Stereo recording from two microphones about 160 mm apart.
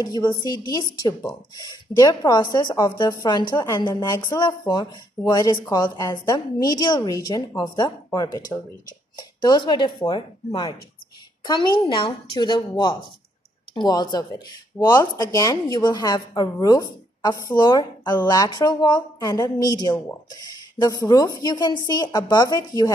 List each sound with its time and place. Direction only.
0.0 s speech: 25° left (ahead or behind)